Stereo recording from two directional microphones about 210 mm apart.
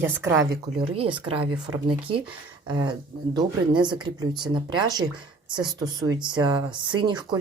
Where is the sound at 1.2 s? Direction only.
25° right (ahead or behind).